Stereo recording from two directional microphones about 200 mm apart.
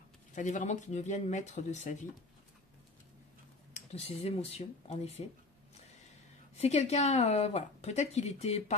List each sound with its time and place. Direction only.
0.3 s speech: 40° left (ahead or behind)
3.7 s speech: 30° left (ahead or behind)
6.5 s speech: 35° left (ahead or behind)